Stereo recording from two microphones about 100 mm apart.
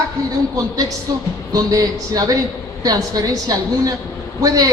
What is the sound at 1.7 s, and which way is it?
A woman's voice, 40° right (ahead or behind).